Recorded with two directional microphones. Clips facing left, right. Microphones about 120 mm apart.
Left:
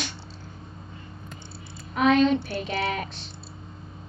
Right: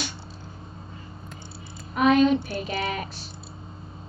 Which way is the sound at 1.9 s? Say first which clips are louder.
Right 1 dB; 5° right (ahead or behind).